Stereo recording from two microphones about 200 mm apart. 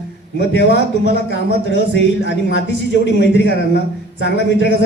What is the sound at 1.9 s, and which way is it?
A man's voice, 65° left (ahead or behind).